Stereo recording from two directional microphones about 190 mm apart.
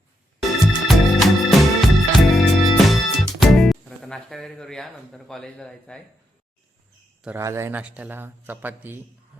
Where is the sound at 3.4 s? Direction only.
Centre (ahead or behind).